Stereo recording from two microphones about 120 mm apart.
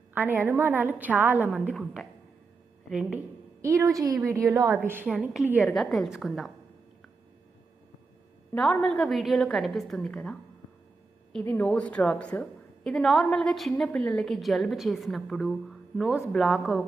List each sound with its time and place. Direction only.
0.1 s a woman's voice: 15° right (ahead or behind)
1.7 s a woman's voice: centre (ahead or behind)
3.6 s a woman's voice: 25° right (ahead or behind)
5.5 s a woman's voice: centre (ahead or behind)
8.5 s a woman's voice: 5° left (ahead or behind)